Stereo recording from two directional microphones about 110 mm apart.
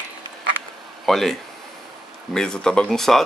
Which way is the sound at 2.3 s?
5° left (ahead or behind).